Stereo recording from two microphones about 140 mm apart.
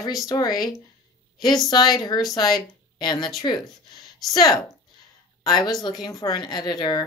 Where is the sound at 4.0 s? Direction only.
Centre (ahead or behind).